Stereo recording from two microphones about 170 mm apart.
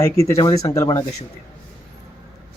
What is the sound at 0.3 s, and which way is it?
Speech, 20° left (ahead or behind).